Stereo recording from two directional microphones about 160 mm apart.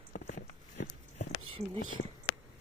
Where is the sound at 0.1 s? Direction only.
70° left (ahead or behind).